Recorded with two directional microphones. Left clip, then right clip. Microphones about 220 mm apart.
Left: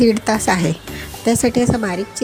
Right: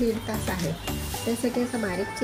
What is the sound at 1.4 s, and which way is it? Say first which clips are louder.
Music: left 9 dB; 40° left (ahead or behind).